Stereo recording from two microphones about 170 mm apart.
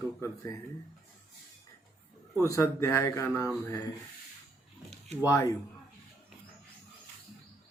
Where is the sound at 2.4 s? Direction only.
20° left (ahead or behind).